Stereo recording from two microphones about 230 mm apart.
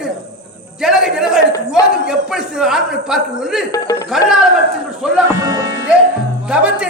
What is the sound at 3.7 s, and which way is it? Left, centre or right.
Speech, centre.